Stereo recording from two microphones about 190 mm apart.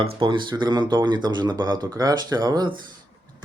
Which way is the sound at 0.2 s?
25° right (ahead or behind).